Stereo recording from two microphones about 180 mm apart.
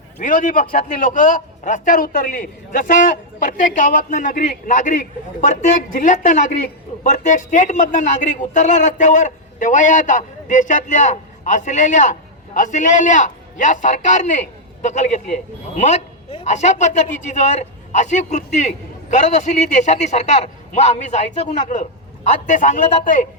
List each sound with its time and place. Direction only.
0.2 s a man's voice: 45° left (ahead or behind)